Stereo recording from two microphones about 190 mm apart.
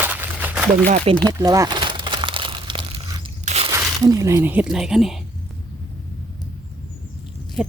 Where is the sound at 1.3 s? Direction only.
20° right (ahead or behind).